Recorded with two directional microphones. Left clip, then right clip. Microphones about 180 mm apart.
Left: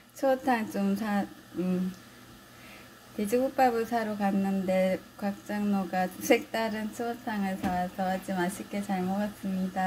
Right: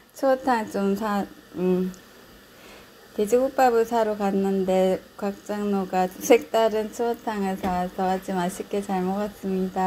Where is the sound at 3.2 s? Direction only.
25° right (ahead or behind).